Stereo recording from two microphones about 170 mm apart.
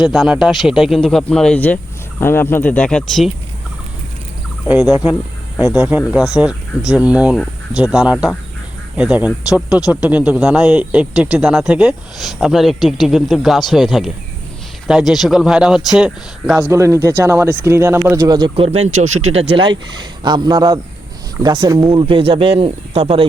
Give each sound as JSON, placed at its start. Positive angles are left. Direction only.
{"t": 0.0, "sound": "speech", "side_deg": 0}
{"t": 4.7, "sound": "speech", "side_deg": -10}
{"t": 16.6, "sound": "speech", "side_deg": -15}